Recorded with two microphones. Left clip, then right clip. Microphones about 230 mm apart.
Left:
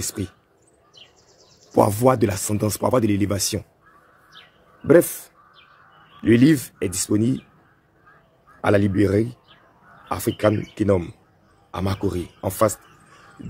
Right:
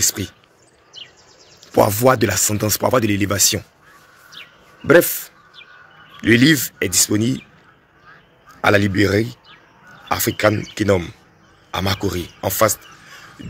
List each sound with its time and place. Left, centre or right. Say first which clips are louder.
0.0 s speech: right 9 dB; centre
1.7 s speech: right 3 dB; centre
4.8 s speech: right 3 dB; centre
6.2 s speech: right 3 dB; centre
8.5 s speech: right 4 dB; centre